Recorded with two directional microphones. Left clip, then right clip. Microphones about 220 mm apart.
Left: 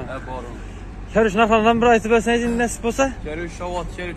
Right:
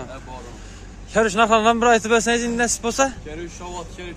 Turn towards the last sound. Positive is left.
turn(degrees=20)  # may be behind; listen again after turning